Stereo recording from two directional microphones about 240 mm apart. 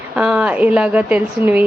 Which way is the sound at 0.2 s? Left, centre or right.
Centre.